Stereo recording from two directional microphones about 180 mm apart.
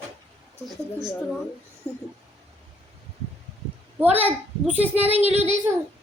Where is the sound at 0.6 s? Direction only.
Centre (ahead or behind).